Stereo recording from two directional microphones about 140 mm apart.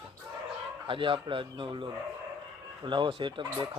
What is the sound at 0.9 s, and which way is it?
A man's voice, 40° right (ahead or behind).